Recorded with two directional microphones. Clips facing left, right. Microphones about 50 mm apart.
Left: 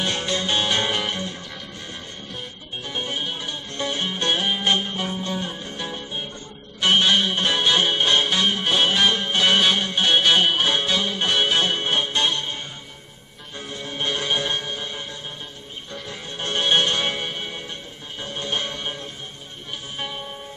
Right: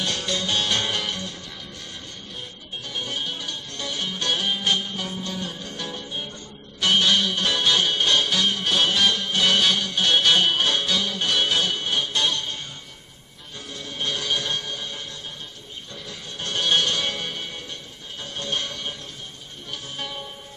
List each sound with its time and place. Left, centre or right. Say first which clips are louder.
0.0 s music: left 2 dB; left
2.9 s music: left 2 dB; left
13.6 s music: left 3 dB; left
16.1 s music: left 3 dB; left